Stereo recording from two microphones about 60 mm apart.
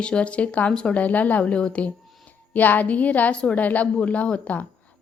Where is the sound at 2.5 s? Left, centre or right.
Left.